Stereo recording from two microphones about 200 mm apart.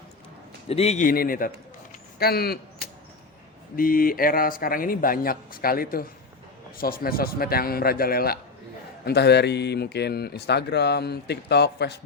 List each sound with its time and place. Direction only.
0.7 s a man's voice: 30° left (ahead or behind); by 11.9 s 55° left (ahead or behind)